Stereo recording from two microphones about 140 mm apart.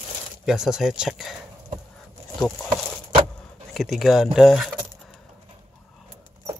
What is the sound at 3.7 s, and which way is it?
Speech, centre (ahead or behind).